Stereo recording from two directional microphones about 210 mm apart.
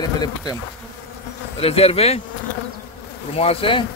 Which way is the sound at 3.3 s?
30° left (ahead or behind).